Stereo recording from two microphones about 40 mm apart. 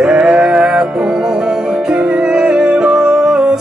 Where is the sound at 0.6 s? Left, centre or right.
Centre.